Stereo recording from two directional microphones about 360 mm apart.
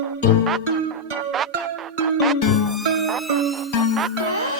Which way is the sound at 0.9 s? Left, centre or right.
Centre.